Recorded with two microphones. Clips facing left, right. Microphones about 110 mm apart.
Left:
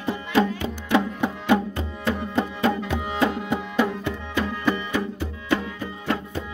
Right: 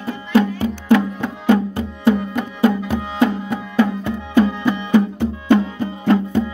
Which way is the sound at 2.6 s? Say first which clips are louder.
Right 6 dB; 25° left (ahead or behind).